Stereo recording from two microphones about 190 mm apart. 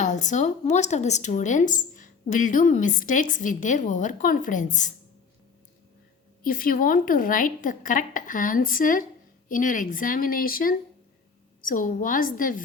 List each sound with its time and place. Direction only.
0.0 s a woman's voice: 40° left (ahead or behind)
6.4 s a woman's voice: 50° left (ahead or behind)